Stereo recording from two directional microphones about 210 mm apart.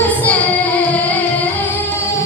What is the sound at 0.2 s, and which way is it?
Child singing, 5° left (ahead or behind).